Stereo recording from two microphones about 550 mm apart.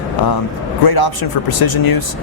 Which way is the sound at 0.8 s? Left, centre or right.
Left.